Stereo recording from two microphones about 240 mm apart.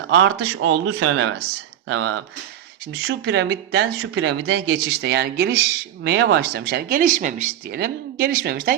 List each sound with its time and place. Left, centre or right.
0.1 s speech: right